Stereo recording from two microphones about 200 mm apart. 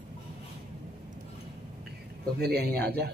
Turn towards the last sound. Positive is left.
turn(degrees=-55)  # may be behind; listen again after turning